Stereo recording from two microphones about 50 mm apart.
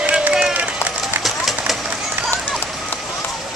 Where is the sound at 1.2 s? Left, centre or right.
Centre.